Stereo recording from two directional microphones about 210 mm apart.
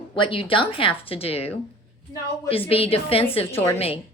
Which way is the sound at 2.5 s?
25° left (ahead or behind).